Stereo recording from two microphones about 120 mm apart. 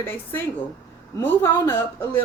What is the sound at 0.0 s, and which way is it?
A woman's voice, 20° left (ahead or behind).